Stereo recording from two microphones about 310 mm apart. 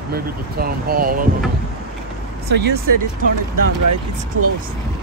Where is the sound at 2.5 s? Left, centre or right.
Right.